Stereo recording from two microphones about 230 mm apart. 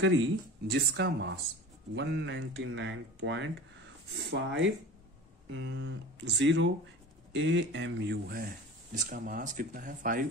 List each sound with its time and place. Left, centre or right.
0.0 s speech: right